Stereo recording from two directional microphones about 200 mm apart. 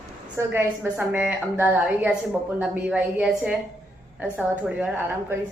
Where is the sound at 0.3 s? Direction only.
10° right (ahead or behind).